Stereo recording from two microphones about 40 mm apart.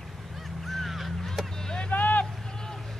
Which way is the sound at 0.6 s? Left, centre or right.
Centre.